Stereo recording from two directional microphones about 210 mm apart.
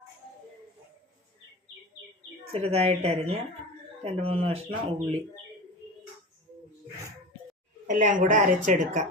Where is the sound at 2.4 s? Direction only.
30° right (ahead or behind).